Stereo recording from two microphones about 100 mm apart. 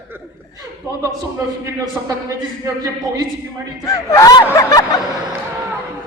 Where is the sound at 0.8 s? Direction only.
30° right (ahead or behind).